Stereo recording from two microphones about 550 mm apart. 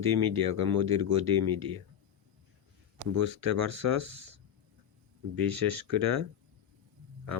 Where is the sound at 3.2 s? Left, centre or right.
Right.